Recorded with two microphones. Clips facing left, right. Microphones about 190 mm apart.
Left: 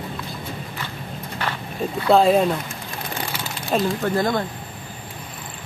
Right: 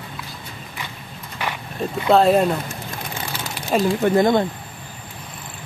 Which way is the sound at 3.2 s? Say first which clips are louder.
Right 2 dB; 10° right (ahead or behind).